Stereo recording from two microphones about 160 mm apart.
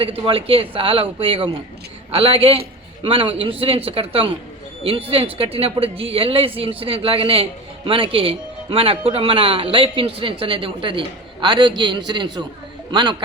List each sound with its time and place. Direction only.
0.0 s speech: 35° right (ahead or behind)